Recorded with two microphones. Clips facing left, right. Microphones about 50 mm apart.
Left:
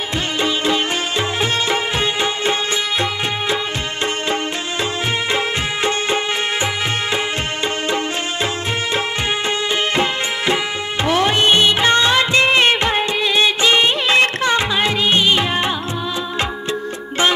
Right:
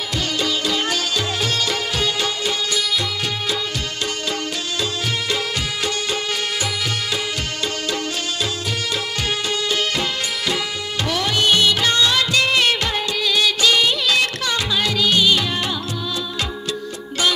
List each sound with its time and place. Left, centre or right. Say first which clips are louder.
0.4 s music: left 5 dB; left
5.3 s music: left 4 dB; left
9.9 s music: left 5 dB; left
11.1 s music of bollywood: left 4 dB; left